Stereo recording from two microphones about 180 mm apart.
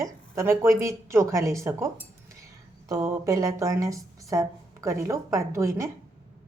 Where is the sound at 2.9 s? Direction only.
20° right (ahead or behind).